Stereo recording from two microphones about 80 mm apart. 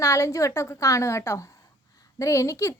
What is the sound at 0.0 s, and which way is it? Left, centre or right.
A woman's voice, left.